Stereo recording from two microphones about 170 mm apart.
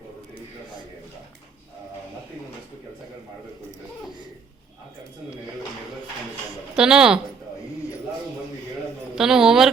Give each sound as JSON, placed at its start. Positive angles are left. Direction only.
{"t": 6.7, "sound": "a woman's voice", "side_deg": -5}
{"t": 9.1, "sound": "a woman's voice", "side_deg": -5}